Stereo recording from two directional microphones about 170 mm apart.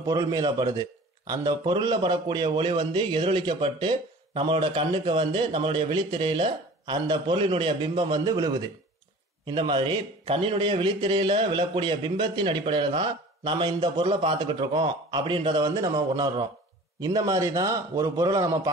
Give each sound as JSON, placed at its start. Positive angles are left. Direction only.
{"t": 0.0, "sound": "a man's voice", "side_deg": -20}